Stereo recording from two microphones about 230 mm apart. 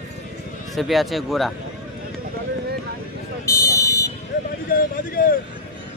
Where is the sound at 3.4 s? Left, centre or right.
Centre.